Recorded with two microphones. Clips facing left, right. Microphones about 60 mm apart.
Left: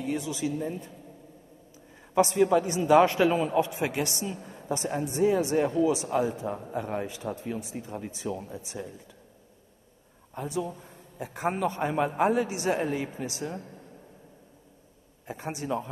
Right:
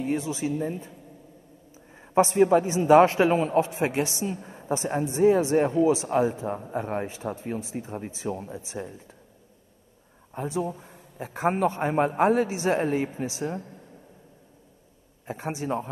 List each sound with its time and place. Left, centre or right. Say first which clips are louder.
0.0 s a woman's voice: right 3 dB; right
2.0 s a man's voice: right 3 dB; right
10.3 s a man's voice: right 3 dB; right
15.2 s a man's voice: right 3 dB; right